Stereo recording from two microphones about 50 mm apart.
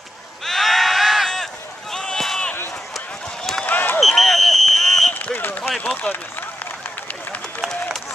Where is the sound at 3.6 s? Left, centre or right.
Left.